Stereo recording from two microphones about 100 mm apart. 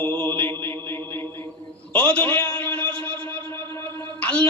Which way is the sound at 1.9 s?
15° left (ahead or behind).